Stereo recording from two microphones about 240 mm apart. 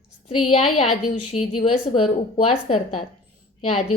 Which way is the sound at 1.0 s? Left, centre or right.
Left.